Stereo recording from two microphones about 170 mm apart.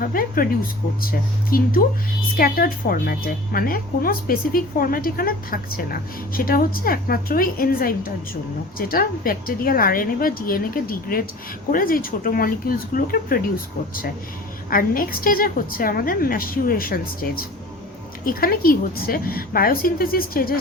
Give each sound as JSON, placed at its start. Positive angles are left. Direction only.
{"t": 0.0, "sound": "a woman's voice", "side_deg": 55}
{"t": 14.7, "sound": "a woman's voice", "side_deg": 55}